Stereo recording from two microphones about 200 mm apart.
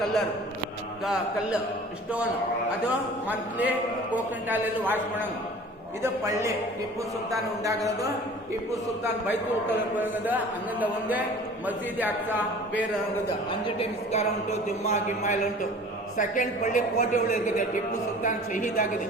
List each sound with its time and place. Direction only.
2.8 s speech: 5° right (ahead or behind)
10.0 s speech: 10° right (ahead or behind)
13.5 s speech: 25° left (ahead or behind)